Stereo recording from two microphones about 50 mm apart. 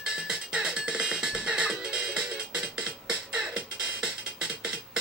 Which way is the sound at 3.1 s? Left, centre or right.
Centre.